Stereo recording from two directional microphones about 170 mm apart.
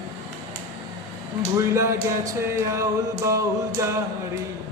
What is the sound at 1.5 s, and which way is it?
Speech, 15° right (ahead or behind).